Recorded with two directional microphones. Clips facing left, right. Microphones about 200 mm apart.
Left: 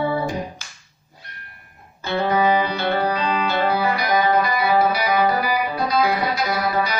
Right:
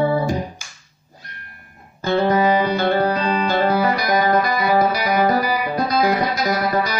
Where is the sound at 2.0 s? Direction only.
45° right (ahead or behind).